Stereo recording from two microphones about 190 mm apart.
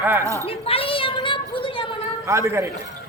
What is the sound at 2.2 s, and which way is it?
Speech, 15° right (ahead or behind).